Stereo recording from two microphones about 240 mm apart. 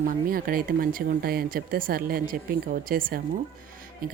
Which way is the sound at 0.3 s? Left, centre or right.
Right.